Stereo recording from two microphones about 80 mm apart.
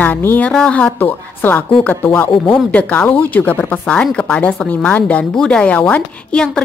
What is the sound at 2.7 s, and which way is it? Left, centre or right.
A woman's voice, left.